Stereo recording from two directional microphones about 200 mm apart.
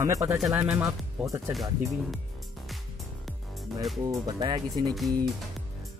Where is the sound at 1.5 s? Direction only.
Centre (ahead or behind).